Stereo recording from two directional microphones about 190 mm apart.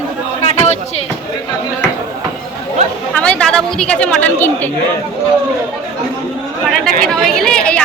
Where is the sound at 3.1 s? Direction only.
5° left (ahead or behind).